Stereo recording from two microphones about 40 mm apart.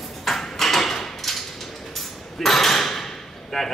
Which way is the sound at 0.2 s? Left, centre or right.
Centre.